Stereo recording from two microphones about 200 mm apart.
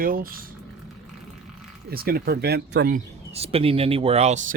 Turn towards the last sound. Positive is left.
turn(degrees=-35)  # may be behind; listen again after turning